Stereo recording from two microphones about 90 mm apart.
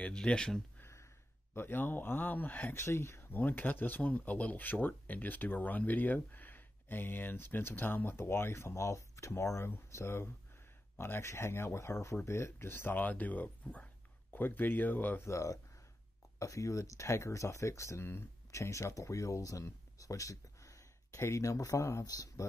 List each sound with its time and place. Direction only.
0.0 s speech: 10° left (ahead or behind)
0.7 s gasp: 30° left (ahead or behind)
1.5 s speech: 25° left (ahead or behind)
2.8 s speech: 30° left (ahead or behind)
15.2 s speech: 35° left (ahead or behind)